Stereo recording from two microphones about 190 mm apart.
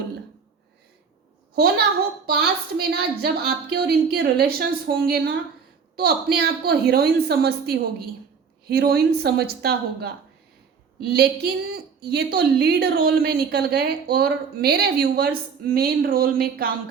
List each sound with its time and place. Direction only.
2.2 s a woman's voice: 55° right (ahead or behind)